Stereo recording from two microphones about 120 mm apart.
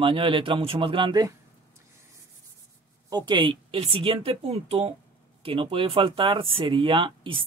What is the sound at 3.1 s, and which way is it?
Speech, 35° right (ahead or behind).